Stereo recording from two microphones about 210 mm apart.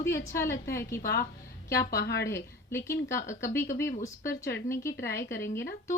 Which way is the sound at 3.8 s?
45° left (ahead or behind).